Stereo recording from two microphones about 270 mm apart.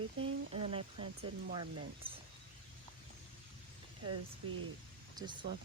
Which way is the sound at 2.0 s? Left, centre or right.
Centre.